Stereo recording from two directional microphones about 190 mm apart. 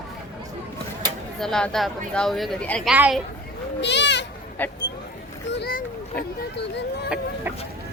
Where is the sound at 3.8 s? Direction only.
65° left (ahead or behind).